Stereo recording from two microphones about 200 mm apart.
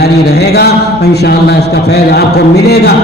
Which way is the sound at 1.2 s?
55° left (ahead or behind).